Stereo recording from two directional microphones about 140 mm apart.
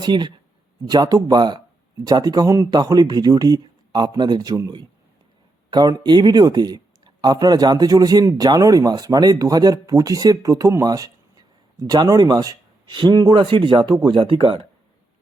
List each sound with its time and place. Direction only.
0.0 s speech: 30° right (ahead or behind)